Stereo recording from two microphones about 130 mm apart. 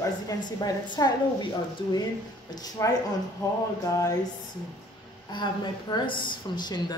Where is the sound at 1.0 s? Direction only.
30° left (ahead or behind).